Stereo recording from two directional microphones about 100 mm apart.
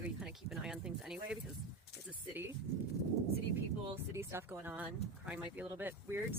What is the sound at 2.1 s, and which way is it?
Speech, 20° right (ahead or behind).